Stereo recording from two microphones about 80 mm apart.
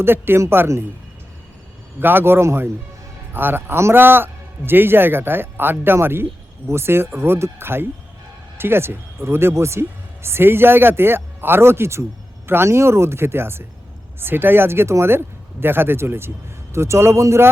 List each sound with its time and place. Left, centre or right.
0.0 s a man's voice: right
2.0 s a man's voice: right